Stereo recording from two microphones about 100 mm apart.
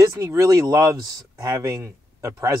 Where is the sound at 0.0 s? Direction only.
30° right (ahead or behind).